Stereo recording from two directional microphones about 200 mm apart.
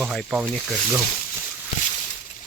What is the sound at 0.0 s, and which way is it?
Speech, centre (ahead or behind).